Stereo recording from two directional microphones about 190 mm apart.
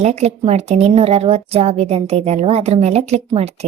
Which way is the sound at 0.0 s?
35° right (ahead or behind).